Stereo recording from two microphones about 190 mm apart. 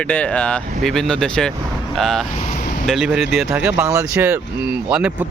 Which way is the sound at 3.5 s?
10° right (ahead or behind).